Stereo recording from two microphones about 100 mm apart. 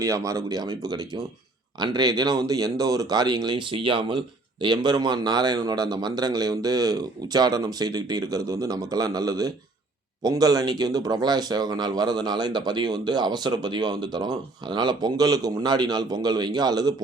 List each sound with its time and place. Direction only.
0.0 s a man's voice: 30° right (ahead or behind); by 4.2 s 60° right (ahead or behind)
4.6 s a man's voice: 45° right (ahead or behind)